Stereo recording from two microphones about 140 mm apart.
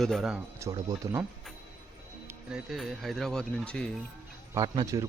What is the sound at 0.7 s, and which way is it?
Speech, 30° right (ahead or behind).